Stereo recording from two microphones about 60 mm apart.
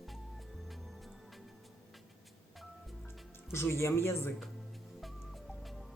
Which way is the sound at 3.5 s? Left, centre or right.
Left.